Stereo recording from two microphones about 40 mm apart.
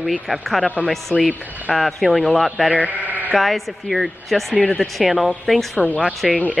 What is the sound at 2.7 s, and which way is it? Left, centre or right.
Bleat, right.